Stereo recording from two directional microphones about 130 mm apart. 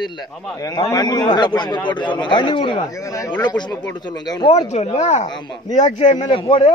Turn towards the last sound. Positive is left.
turn(degrees=40)  # may be behind; listen again after turning